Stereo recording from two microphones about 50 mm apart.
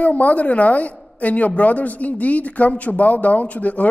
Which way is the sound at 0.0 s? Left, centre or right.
Left.